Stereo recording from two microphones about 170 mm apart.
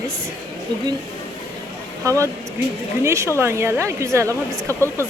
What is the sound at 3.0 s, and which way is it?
Speech, 15° right (ahead or behind).